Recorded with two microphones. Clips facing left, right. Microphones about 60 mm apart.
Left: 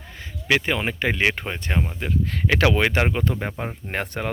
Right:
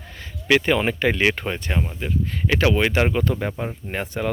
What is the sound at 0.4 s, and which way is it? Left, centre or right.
Speech, centre.